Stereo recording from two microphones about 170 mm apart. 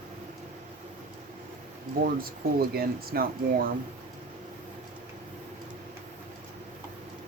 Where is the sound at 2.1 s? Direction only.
60° right (ahead or behind).